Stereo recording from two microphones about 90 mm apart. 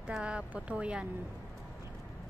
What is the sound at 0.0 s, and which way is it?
Speech, 10° right (ahead or behind).